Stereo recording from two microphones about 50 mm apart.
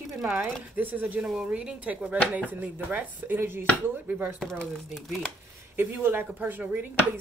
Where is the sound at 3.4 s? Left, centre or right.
Right.